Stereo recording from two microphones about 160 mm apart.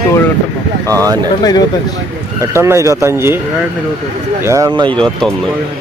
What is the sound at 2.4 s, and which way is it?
Speech, 15° right (ahead or behind).